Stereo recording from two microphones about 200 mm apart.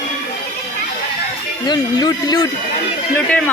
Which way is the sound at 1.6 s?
20° left (ahead or behind).